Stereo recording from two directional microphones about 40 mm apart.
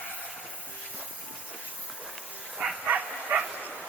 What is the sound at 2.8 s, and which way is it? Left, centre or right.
Dog, right.